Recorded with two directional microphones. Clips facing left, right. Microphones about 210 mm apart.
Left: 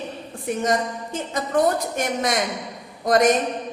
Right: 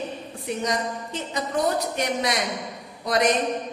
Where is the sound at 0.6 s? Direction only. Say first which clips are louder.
Left 5 dB; 50° left (ahead or behind).